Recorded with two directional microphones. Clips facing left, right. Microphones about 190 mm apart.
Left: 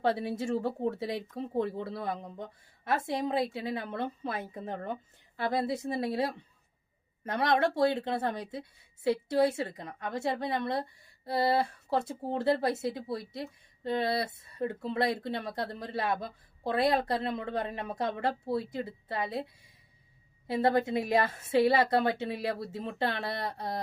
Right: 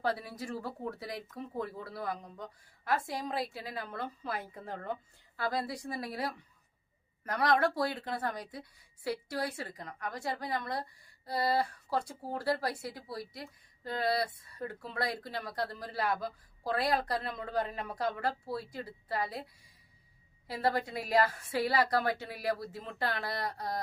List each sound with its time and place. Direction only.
0.0 s speech: 25° left (ahead or behind)
20.5 s speech: 25° left (ahead or behind)